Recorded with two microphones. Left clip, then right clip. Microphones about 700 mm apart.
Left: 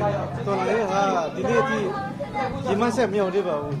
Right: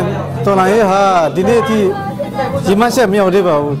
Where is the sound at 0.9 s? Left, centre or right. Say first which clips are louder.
Right 12 dB; right.